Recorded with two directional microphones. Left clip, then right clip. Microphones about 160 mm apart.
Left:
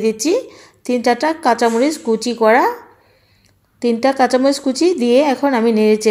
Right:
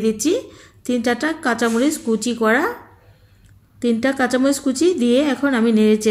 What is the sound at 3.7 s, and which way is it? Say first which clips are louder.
A woman's voice: left 5 dB; 20° left (ahead or behind).